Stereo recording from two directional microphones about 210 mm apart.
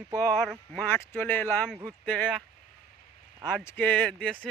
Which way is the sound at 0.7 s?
5° left (ahead or behind).